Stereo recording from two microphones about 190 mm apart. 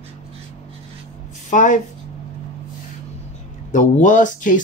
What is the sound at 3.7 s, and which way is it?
Speech, 40° left (ahead or behind).